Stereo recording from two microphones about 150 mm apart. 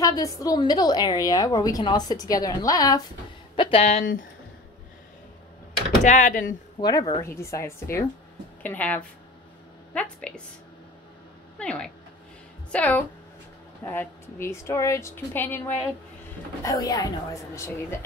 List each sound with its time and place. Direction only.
0.0 s a woman's voice: 25° left (ahead or behind)
3.5 s speech: 35° left (ahead or behind)
4.0 s speech: 65° left (ahead or behind)
6.0 s speech: 55° left (ahead or behind)
6.8 s a woman's voice: 25° left (ahead or behind); by 10.4 s 10° left (ahead or behind)
11.5 s a woman's voice: 5° left (ahead or behind)
16.6 s a woman's voice: 25° left (ahead or behind)